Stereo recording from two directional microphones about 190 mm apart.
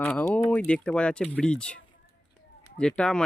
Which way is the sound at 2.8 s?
5° left (ahead or behind).